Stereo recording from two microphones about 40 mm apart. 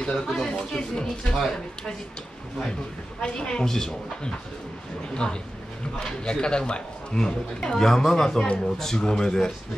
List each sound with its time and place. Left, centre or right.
0.0 s a man's voice: centre
3.2 s a man's voice: left
3.6 s a man's voice: centre
5.1 s a man's voice: left
7.2 s a man's voice: centre